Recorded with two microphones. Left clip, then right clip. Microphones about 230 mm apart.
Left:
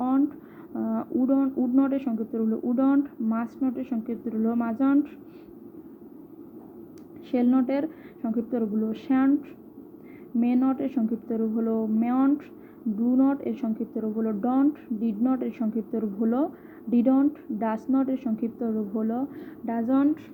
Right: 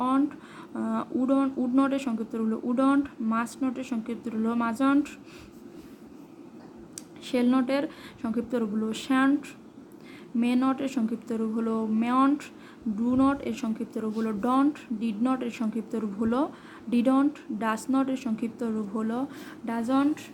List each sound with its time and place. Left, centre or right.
0.7 s speech: centre
7.3 s speech: centre
10.4 s speech: centre